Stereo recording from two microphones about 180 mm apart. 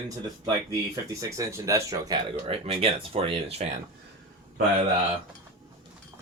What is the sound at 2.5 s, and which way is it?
Speech, 35° right (ahead or behind).